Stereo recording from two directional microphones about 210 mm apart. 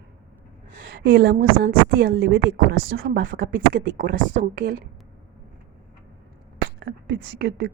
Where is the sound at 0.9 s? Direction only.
55° right (ahead or behind).